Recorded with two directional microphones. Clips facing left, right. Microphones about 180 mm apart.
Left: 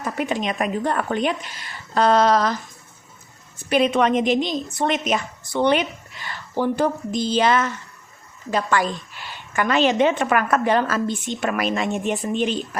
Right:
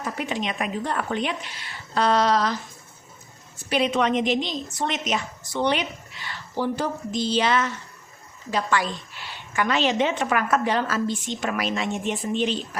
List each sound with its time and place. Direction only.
0.2 s a woman's voice: 45° left (ahead or behind)
3.7 s a woman's voice: 50° left (ahead or behind)